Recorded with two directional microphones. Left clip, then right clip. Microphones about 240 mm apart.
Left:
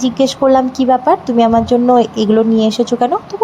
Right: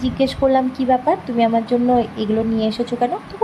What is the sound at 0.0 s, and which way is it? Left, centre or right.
A woman's voice, left.